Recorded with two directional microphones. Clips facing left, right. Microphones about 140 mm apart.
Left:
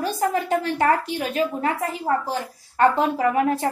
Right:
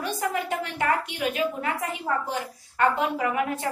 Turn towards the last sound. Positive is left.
turn(degrees=35)  # may be behind; listen again after turning